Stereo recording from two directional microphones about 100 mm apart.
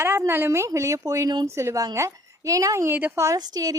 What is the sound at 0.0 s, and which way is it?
Speech, 25° right (ahead or behind).